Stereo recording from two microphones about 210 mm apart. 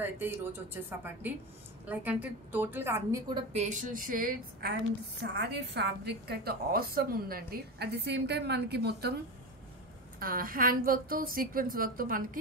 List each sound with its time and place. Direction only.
0.0 s a woman's voice: 10° right (ahead or behind)
3.5 s a woman's voice: 35° right (ahead or behind)